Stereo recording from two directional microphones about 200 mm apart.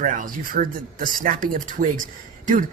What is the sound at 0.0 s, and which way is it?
Speech, 40° right (ahead or behind).